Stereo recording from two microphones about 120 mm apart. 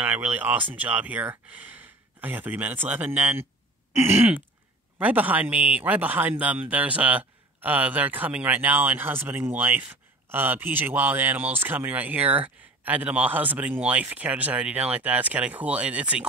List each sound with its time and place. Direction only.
0.0 s speech: 15° right (ahead or behind)
3.9 s throat clearing: 20° right (ahead or behind)
5.0 s speech: 15° right (ahead or behind)